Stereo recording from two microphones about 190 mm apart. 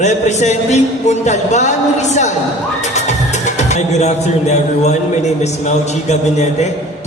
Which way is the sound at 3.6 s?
35° left (ahead or behind).